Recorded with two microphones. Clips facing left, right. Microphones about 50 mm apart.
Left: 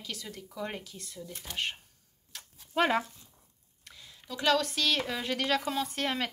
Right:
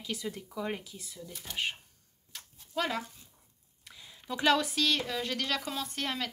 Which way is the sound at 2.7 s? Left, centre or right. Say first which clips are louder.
Left 6 dB; left.